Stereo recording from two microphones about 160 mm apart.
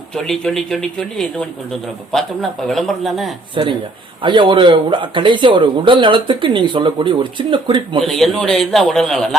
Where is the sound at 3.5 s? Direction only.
30° right (ahead or behind).